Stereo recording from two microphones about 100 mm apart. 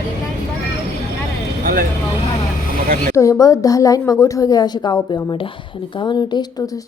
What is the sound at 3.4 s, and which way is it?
Speech, 35° left (ahead or behind).